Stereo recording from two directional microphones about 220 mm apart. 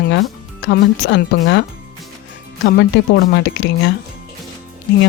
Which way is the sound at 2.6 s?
45° left (ahead or behind).